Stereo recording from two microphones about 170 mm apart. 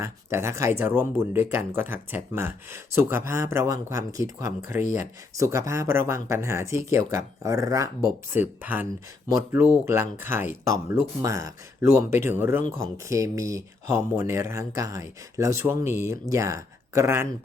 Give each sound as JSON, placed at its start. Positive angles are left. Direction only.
{"t": 0.0, "sound": "speech", "side_deg": -15}